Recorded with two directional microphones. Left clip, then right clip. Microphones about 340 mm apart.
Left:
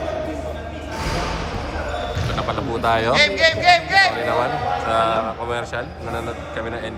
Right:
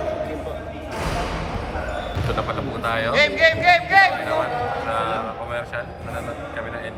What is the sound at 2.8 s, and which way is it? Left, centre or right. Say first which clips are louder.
Speech: left 5 dB; centre.